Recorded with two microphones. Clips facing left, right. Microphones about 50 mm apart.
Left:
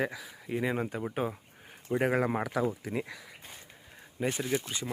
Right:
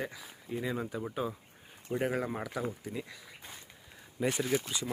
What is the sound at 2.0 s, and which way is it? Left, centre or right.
Speech, left.